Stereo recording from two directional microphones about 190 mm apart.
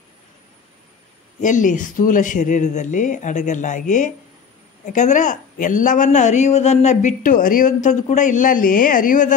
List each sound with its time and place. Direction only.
1.4 s a woman's voice: 40° left (ahead or behind)